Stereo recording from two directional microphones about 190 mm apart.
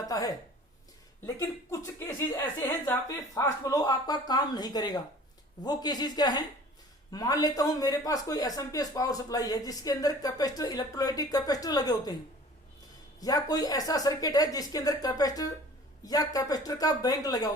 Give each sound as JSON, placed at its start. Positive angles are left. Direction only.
{"t": 0.1, "sound": "a sound", "side_deg": 20}
{"t": 1.4, "sound": "a man's voice", "side_deg": 15}
{"t": 13.1, "sound": "a man's voice", "side_deg": 20}